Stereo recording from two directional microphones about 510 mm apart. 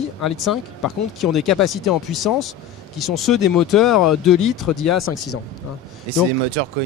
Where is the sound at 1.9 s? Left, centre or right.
Centre.